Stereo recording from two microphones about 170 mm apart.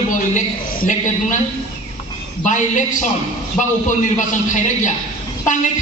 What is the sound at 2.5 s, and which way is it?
A man's voice, 45° left (ahead or behind).